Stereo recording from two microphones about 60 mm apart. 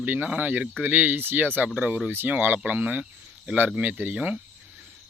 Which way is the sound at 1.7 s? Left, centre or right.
Centre.